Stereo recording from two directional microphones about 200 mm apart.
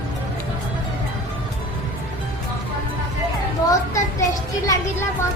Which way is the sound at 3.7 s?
15° left (ahead or behind).